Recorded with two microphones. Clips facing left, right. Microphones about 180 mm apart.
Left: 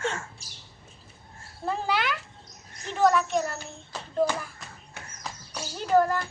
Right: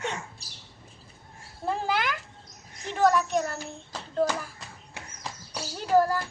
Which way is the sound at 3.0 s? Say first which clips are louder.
Even; centre (ahead or behind).